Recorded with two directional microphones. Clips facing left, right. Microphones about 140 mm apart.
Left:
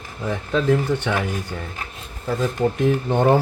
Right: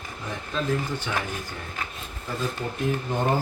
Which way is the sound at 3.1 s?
70° left (ahead or behind).